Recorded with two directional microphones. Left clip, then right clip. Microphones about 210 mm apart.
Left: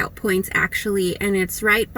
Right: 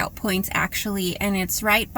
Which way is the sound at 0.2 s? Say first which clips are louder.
Left 7 dB; 20° right (ahead or behind).